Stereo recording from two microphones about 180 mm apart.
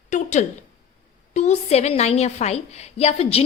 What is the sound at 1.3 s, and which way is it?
A woman's voice, 40° left (ahead or behind).